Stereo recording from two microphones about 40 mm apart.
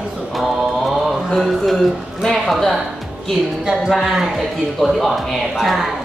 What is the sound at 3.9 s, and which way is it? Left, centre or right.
Speech, centre.